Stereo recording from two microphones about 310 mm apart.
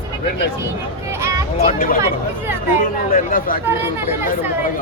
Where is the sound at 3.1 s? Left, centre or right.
Left.